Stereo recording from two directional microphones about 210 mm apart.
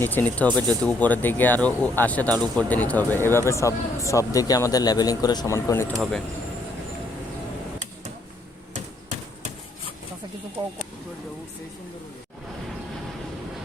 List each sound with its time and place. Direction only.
0.0 s speech: 10° left (ahead or behind)
6.0 s speech: centre (ahead or behind)
8.7 s a sound: 35° right (ahead or behind)
10.6 s speech: 20° right (ahead or behind)